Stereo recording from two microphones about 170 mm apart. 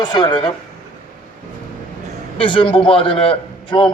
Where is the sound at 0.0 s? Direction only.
25° left (ahead or behind).